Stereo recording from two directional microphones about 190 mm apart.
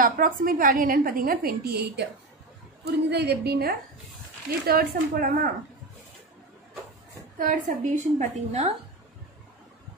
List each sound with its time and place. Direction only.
0.0 s a woman's voice: 45° right (ahead or behind)
7.3 s a woman's voice: 45° right (ahead or behind)